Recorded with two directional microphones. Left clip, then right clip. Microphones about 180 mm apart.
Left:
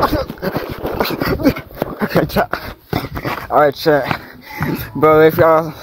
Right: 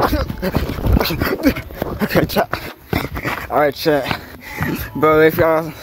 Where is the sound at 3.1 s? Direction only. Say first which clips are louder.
Even; 45° left (ahead or behind).